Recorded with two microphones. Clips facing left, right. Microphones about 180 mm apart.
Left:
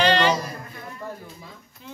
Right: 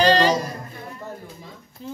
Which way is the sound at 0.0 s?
35° right (ahead or behind).